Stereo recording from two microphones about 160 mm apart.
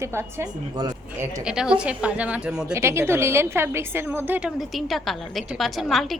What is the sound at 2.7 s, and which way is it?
A woman's voice, 15° right (ahead or behind).